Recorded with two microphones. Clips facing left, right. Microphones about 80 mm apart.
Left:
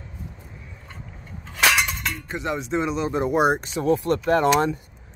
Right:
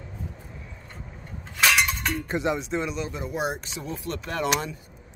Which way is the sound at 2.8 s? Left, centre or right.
Left.